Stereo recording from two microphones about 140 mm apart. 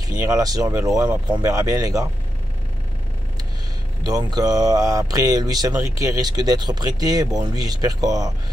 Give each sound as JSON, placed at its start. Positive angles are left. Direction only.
{"t": 0.0, "sound": "speech", "side_deg": -25}
{"t": 4.0, "sound": "speech", "side_deg": -30}